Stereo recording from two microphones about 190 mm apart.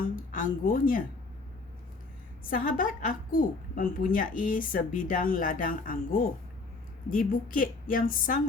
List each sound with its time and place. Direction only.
0.3 s speech: 45° left (ahead or behind)
2.4 s a woman's voice: 45° left (ahead or behind)